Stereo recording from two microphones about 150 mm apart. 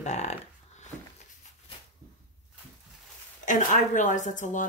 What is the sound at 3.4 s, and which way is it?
A woman's voice, 55° left (ahead or behind).